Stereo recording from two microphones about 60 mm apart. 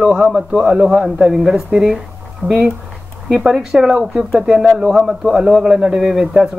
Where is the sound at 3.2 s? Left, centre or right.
Centre.